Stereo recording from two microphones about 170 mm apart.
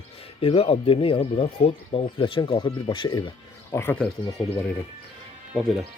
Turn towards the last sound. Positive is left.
turn(degrees=0)  # may be behind; listen again after turning